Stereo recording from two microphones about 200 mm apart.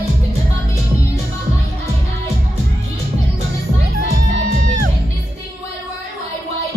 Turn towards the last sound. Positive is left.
turn(degrees=-45)  # may be behind; listen again after turning